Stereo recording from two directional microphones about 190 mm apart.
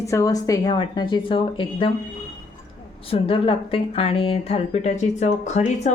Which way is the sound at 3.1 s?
30° left (ahead or behind).